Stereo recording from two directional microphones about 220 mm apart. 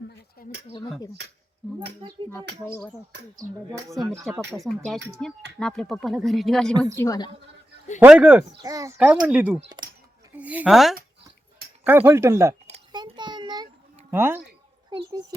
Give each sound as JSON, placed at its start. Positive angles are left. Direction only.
{"t": 0.4, "sound": "a sound", "side_deg": 40}
{"t": 4.0, "sound": "speech", "side_deg": -15}
{"t": 5.1, "sound": "speech", "side_deg": 5}
{"t": 6.9, "sound": "a woman's voice", "side_deg": 15}
{"t": 7.9, "sound": "speech", "side_deg": -5}
{"t": 9.6, "sound": "speech", "side_deg": -20}
{"t": 10.3, "sound": "speech", "side_deg": -5}
{"t": 12.6, "sound": "a sound", "side_deg": -25}
{"t": 14.1, "sound": "a child's voice", "side_deg": -10}